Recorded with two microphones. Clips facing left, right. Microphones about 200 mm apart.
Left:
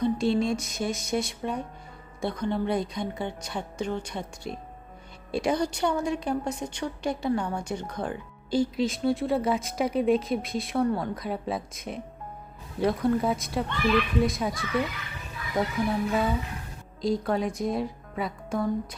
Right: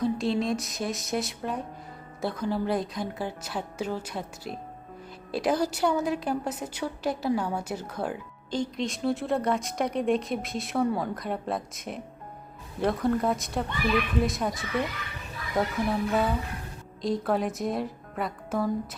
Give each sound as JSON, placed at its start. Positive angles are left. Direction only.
{"t": 0.0, "sound": "speech", "side_deg": 0}
{"t": 8.4, "sound": "speech", "side_deg": 10}